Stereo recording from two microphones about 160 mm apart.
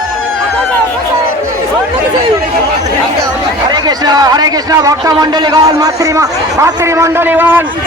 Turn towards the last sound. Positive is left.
turn(degrees=-10)  # may be behind; listen again after turning